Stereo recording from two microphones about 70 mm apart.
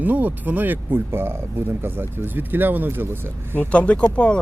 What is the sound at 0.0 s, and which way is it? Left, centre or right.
A woman's voice, right.